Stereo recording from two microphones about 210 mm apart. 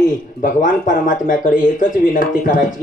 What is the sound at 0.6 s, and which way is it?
Speech, 40° left (ahead or behind).